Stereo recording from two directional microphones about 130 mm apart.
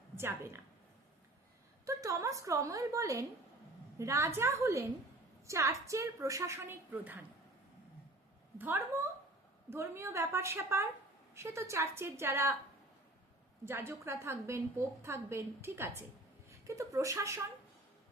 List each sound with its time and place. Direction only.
0.2 s a woman's voice: 15° right (ahead or behind)
1.9 s a woman's voice: 25° right (ahead or behind)
8.5 s a woman's voice: 15° right (ahead or behind)
13.7 s a woman's voice: 20° right (ahead or behind)